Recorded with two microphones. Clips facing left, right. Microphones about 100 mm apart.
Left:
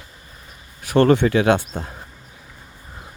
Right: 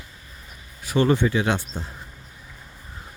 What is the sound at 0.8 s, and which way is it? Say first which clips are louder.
Speech: left 5 dB; 60° left (ahead or behind).